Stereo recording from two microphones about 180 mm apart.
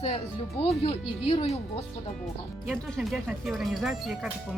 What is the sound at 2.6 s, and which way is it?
Speech, centre (ahead or behind).